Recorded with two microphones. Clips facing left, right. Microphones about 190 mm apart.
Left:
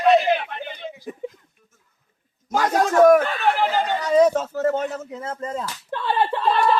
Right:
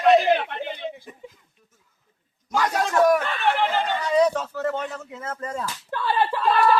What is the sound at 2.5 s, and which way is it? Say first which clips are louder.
Speech: left 3 dB; 45° left (ahead or behind).